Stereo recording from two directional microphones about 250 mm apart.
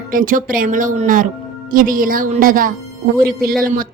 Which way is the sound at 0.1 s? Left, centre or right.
Right.